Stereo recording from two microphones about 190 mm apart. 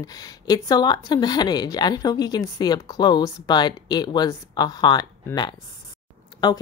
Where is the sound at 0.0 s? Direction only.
20° left (ahead or behind).